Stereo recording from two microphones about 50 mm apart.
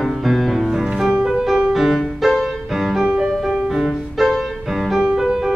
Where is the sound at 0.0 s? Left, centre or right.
Centre.